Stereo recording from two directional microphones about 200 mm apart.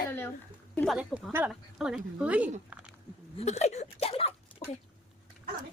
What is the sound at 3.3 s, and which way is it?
Speech, 35° left (ahead or behind).